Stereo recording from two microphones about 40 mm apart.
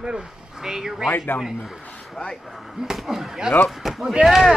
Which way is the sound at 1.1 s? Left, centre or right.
Left.